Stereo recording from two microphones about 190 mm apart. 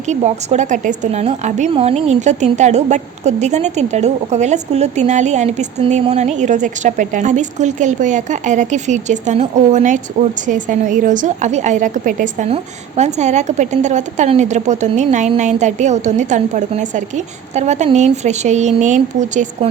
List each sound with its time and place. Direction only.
0.1 s a woman's voice: 35° right (ahead or behind)